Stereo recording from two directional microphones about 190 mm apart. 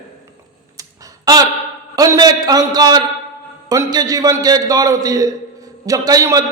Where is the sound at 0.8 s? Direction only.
20° right (ahead or behind).